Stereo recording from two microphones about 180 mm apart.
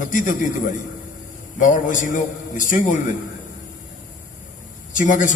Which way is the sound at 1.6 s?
45° left (ahead or behind).